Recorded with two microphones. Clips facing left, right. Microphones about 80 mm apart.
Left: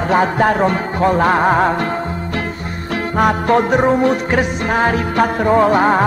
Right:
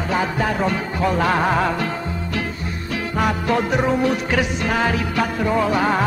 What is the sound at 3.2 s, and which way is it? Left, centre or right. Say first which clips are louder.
Music: left 6 dB; left.